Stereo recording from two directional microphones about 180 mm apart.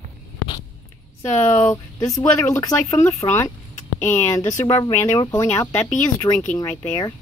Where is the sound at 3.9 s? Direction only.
40° left (ahead or behind).